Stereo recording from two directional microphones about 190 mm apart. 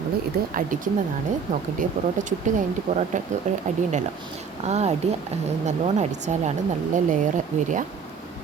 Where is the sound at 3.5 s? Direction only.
40° right (ahead or behind).